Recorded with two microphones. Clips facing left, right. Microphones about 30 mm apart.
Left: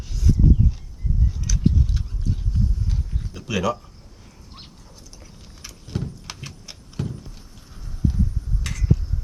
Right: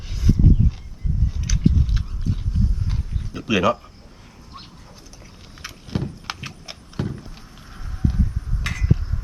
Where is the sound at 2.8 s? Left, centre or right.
Right.